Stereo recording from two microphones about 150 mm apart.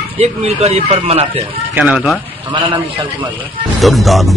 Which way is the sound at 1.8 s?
5° right (ahead or behind).